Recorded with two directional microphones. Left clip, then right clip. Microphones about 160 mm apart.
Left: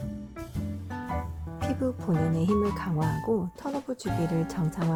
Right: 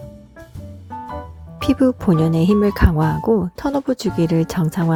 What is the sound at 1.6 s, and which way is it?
Speech, 55° right (ahead or behind).